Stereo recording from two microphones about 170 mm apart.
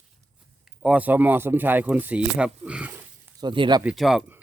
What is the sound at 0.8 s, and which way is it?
Speech, 10° right (ahead or behind).